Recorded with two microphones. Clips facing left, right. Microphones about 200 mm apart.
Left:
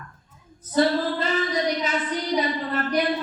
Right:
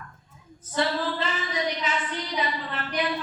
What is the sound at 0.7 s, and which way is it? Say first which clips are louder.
A woman's voice: left 6 dB; 40° left (ahead or behind).